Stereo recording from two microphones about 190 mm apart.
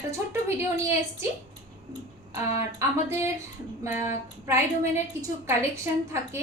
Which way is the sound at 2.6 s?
15° right (ahead or behind).